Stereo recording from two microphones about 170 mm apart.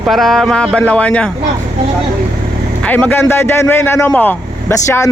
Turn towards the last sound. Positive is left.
turn(degrees=15)  # may be behind; listen again after turning